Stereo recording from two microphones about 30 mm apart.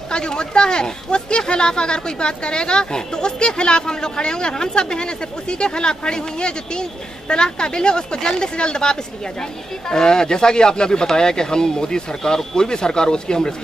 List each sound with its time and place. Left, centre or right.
0.1 s speech: left